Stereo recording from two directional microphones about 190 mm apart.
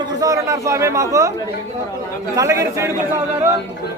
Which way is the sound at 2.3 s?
15° right (ahead or behind).